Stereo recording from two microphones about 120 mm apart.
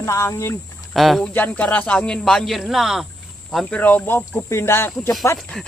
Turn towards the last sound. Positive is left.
turn(degrees=5)  # may be behind; listen again after turning